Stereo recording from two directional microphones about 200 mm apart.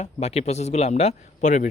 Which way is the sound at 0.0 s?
30° left (ahead or behind).